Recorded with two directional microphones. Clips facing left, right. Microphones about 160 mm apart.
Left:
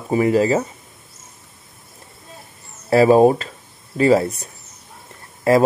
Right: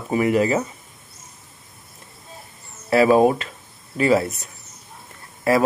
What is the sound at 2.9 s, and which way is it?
Speech, 35° left (ahead or behind).